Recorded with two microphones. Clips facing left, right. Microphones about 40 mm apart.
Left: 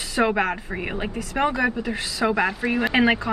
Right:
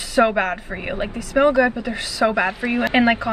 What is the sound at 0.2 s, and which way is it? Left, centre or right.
Speech, centre.